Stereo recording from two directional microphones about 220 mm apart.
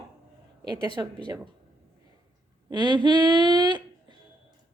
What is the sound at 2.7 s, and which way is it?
Speech, 20° right (ahead or behind).